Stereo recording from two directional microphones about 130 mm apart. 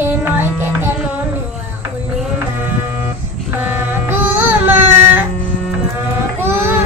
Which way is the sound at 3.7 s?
15° right (ahead or behind).